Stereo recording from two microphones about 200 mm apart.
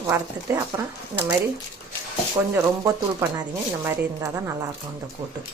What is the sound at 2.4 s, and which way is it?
Speech, 15° right (ahead or behind).